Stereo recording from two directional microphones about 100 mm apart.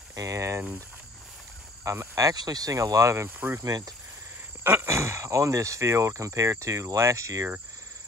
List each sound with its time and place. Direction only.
0.1 s speech: 30° right (ahead or behind)
1.9 s speech: 30° right (ahead or behind)
3.6 s speech: 40° right (ahead or behind)
4.6 s speech: 25° right (ahead or behind)